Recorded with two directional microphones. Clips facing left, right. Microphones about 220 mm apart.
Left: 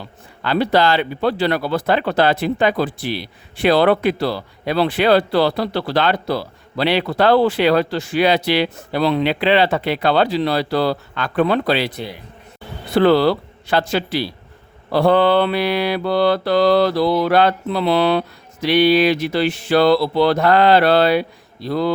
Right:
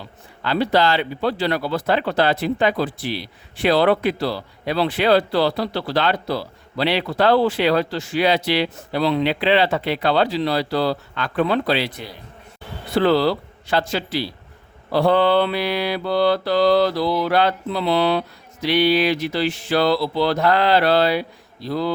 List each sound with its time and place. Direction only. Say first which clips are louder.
0.4 s speech: left 2 dB; 60° left (ahead or behind)
13.0 s speech: left 4 dB; 65° left (ahead or behind)
19.3 s speech: left 4 dB; 60° left (ahead or behind)